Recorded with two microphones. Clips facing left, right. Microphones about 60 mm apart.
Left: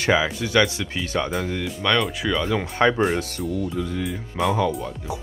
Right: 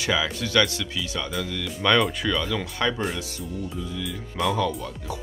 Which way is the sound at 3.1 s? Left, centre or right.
Left.